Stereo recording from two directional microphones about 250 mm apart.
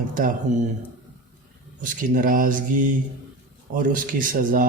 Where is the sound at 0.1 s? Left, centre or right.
Right.